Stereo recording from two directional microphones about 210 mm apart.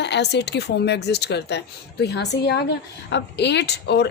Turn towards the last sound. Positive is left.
turn(degrees=55)  # may be behind; listen again after turning